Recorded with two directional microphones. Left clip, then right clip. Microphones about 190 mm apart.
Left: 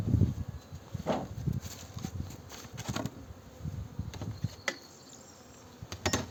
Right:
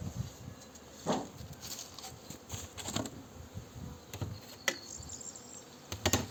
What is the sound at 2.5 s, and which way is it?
Patter, 10° right (ahead or behind).